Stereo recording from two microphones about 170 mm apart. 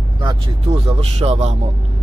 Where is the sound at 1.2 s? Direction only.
35° right (ahead or behind).